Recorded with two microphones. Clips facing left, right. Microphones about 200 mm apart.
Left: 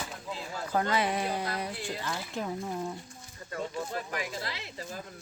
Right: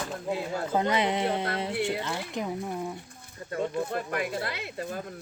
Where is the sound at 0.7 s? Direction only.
20° right (ahead or behind).